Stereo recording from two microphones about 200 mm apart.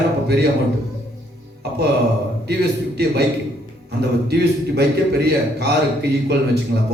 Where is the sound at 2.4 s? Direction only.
55° right (ahead or behind).